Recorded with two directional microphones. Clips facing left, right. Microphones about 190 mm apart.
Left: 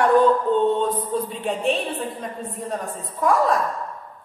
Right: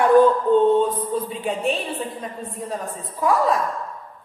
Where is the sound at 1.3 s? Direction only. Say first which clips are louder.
Left 1 dB; centre (ahead or behind).